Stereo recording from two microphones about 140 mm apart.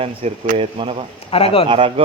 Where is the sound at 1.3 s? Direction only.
45° left (ahead or behind).